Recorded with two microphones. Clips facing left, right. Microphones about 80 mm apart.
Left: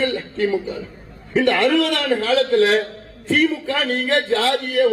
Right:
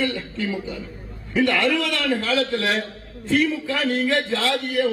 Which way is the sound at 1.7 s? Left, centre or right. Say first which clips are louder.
Left 4 dB; left.